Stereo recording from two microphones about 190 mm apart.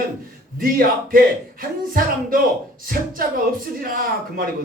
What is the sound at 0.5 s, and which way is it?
Speech, 50° right (ahead or behind).